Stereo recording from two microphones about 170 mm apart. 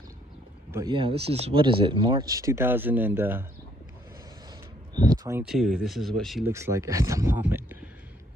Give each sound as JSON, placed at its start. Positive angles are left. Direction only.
{"t": 0.7, "sound": "speech", "side_deg": -15}
{"t": 0.9, "sound": "speech", "side_deg": -35}
{"t": 4.9, "sound": "speech", "side_deg": -25}
{"t": 5.4, "sound": "speech", "side_deg": 0}
{"t": 6.4, "sound": "speech", "side_deg": -15}